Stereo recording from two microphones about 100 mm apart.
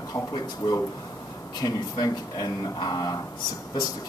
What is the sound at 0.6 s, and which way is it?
Speech, 45° left (ahead or behind).